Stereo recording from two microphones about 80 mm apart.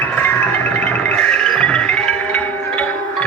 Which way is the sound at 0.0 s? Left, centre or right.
Left.